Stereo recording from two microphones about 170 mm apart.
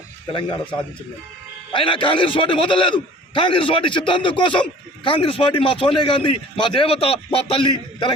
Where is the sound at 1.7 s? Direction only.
30° left (ahead or behind).